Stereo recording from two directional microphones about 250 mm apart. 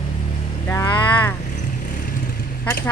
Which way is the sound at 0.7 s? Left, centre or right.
Centre.